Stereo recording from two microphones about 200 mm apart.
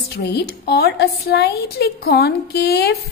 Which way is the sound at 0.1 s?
55° left (ahead or behind).